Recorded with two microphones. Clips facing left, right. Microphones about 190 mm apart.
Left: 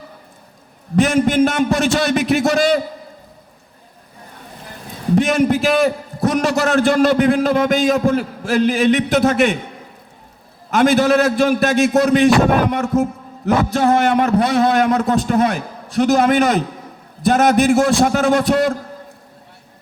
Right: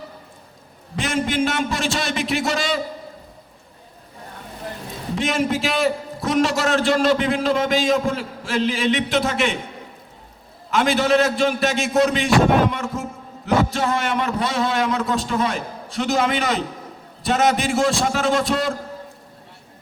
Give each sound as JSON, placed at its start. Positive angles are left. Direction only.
{"t": 0.9, "sound": "a man's voice", "side_deg": 50}
{"t": 5.1, "sound": "a man's voice", "side_deg": 50}
{"t": 10.7, "sound": "a man's voice", "side_deg": 50}